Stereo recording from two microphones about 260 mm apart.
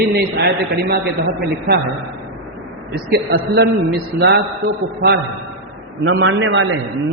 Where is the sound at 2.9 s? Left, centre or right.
Right.